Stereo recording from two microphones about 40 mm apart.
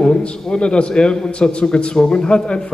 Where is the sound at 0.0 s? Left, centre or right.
Left.